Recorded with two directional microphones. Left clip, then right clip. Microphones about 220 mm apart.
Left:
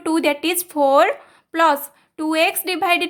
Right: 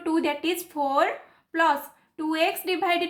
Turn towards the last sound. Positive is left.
turn(degrees=45)  # may be behind; listen again after turning